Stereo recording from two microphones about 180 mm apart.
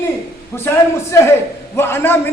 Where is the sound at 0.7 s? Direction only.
15° left (ahead or behind).